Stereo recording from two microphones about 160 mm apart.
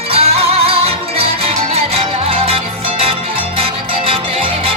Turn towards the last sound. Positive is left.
turn(degrees=-35)  # may be behind; listen again after turning